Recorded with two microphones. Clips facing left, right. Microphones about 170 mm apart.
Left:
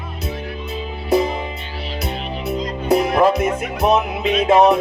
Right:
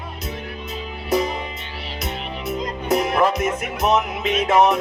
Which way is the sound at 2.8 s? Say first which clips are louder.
Left 4 dB; 30° left (ahead or behind).